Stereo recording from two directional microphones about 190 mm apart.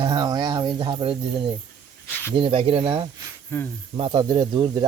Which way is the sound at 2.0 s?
10° left (ahead or behind).